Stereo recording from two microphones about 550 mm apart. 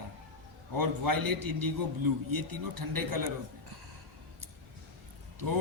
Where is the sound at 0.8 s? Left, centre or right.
Right.